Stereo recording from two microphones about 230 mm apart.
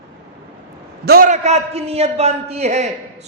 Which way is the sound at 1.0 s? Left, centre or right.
Right.